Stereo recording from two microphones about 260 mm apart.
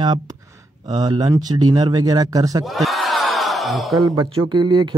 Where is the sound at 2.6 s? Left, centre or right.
Centre.